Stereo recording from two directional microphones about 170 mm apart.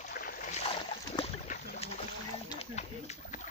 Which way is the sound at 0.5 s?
35° left (ahead or behind).